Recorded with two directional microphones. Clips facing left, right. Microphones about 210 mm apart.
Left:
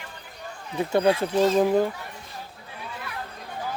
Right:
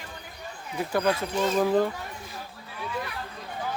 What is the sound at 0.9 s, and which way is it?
Speech, 25° left (ahead or behind).